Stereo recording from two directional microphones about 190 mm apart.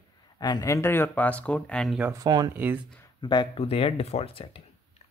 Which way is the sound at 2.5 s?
10° right (ahead or behind).